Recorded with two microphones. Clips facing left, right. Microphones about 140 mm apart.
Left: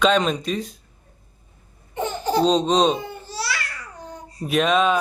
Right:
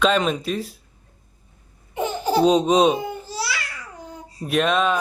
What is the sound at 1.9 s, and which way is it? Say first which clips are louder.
Babbling: right 1 dB; 10° right (ahead or behind).